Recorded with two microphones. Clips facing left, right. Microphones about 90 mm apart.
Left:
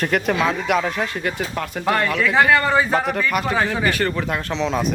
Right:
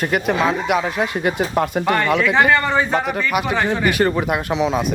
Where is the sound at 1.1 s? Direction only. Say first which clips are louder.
Right 6 dB; 20° right (ahead or behind).